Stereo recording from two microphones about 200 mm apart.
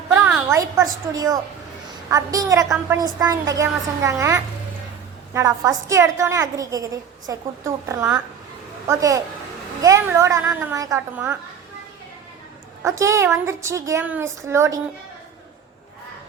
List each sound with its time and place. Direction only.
0.1 s a woman's voice: 10° right (ahead or behind)
12.8 s a woman's voice: 15° right (ahead or behind)